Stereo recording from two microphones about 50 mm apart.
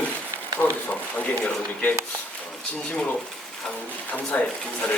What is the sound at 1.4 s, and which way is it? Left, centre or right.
Speech, left.